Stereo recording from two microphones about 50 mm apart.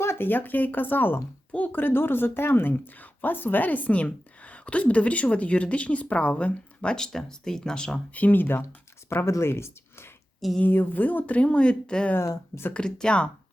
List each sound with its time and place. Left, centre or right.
0.0 s a sound: left
0.3 s speech: left
3.0 s a woman's voice: left
6.9 s speech: centre
8.1 s speech: left
9.0 s speech: left
10.7 s speech: left
11.3 s a woman's voice: left
12.2 s speech: left
12.7 s a woman's voice: centre